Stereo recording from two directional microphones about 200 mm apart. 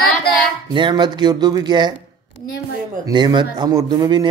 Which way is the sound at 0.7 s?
20° right (ahead or behind).